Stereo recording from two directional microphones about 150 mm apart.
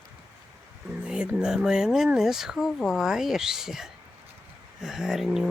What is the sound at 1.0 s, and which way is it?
Speech, 10° right (ahead or behind).